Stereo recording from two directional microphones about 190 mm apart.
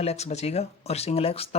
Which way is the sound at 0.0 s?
35° left (ahead or behind).